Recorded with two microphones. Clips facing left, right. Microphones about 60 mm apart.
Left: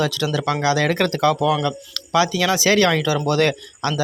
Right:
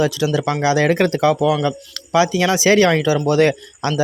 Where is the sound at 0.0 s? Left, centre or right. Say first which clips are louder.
Right 3 dB; centre.